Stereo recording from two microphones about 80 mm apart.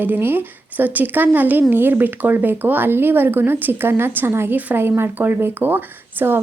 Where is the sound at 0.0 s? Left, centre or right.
Right.